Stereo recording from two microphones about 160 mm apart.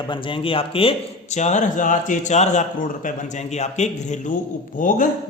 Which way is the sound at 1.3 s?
50° left (ahead or behind).